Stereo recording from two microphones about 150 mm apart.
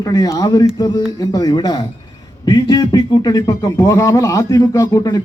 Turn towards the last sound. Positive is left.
turn(degrees=20)  # may be behind; listen again after turning